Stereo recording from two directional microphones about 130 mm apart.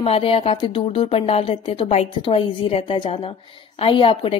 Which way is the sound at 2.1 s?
40° left (ahead or behind).